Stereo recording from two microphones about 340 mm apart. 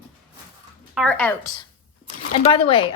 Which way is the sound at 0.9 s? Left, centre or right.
Centre.